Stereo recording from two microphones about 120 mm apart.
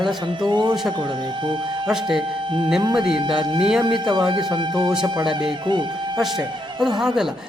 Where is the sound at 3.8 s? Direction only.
40° right (ahead or behind).